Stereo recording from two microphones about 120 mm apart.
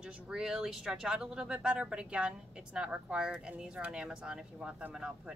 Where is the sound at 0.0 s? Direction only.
5° right (ahead or behind).